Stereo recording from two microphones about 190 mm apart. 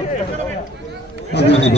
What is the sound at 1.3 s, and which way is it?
Speech, 60° left (ahead or behind).